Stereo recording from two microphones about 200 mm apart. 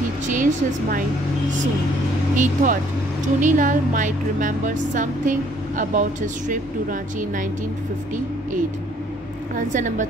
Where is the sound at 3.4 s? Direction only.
40° right (ahead or behind).